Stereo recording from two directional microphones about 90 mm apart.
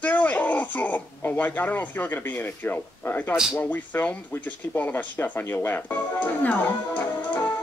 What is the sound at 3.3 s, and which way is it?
Speech, 5° right (ahead or behind).